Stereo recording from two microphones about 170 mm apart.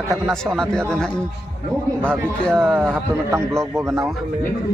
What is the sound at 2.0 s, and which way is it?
Speech, 5° left (ahead or behind).